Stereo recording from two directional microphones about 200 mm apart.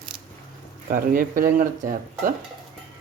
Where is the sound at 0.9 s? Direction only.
45° right (ahead or behind).